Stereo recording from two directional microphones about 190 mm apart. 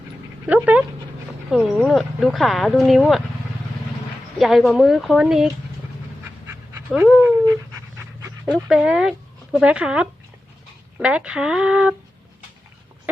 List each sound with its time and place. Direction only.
0.4 s speech: 5° right (ahead or behind)
4.4 s speech: centre (ahead or behind)
6.7 s dog: 10° right (ahead or behind)
8.4 s speech: centre (ahead or behind)